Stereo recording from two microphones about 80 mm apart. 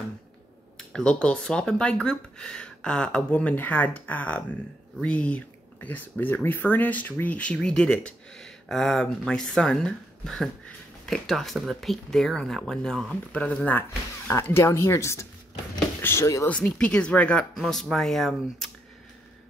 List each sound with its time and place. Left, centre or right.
0.7 s speech: centre
13.7 s speech: left
14.3 s speech: left
16.4 s speech: centre
17.6 s speech: centre